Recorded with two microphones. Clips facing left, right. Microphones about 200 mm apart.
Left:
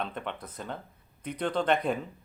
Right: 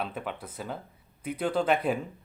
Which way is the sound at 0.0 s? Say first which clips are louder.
Right 1 dB; 5° right (ahead or behind).